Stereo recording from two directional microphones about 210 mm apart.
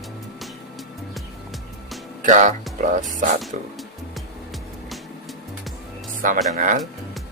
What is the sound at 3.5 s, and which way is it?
Speech, 35° right (ahead or behind).